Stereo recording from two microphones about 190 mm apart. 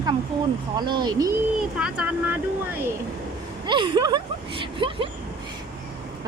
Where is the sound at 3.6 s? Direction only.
25° right (ahead or behind).